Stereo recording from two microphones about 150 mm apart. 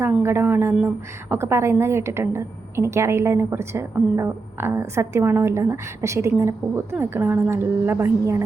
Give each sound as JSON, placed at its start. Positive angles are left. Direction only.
{"t": 0.0, "sound": "a woman's voice", "side_deg": -15}